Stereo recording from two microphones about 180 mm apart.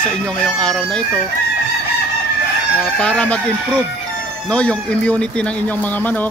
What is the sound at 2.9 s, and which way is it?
Speech, 5° left (ahead or behind).